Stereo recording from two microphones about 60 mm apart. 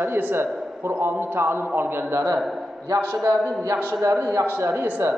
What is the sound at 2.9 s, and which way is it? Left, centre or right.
Speech, right.